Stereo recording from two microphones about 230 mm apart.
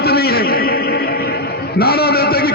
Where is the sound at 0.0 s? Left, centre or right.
Left.